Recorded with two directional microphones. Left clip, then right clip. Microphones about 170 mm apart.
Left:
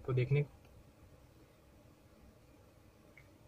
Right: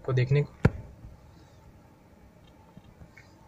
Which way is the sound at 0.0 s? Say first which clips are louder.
Right 8 dB; 15° right (ahead or behind).